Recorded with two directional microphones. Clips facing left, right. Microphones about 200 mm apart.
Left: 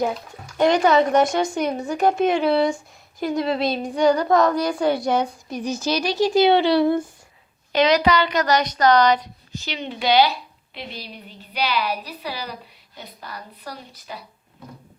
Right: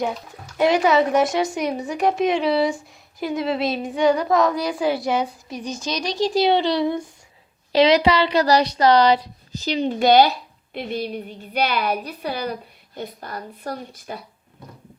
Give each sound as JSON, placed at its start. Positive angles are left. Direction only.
{"t": 0.0, "sound": "a woman's voice", "side_deg": 0}
{"t": 7.7, "sound": "a woman's voice", "side_deg": -25}